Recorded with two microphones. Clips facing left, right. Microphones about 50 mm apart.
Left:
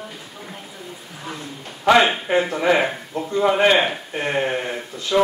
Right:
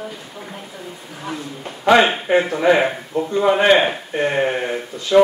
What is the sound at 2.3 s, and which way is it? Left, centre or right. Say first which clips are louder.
Speech: right 3 dB; centre.